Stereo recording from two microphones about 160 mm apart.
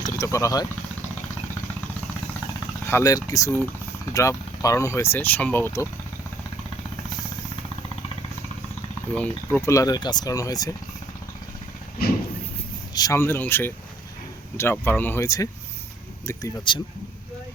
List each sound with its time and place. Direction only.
0.0 s speech: 20° left (ahead or behind)
2.8 s speech: 20° left (ahead or behind)
9.1 s speech: 10° left (ahead or behind)
12.9 s speech: 25° left (ahead or behind)